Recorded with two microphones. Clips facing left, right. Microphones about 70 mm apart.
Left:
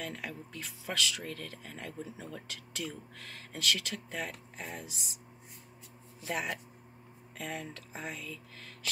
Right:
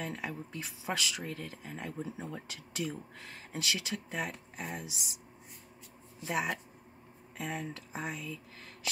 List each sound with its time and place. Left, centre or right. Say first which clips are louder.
0.0 s speech: right 2 dB; centre
6.2 s speech: right 2 dB; centre